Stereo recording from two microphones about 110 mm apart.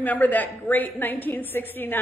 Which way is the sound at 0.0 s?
15° left (ahead or behind).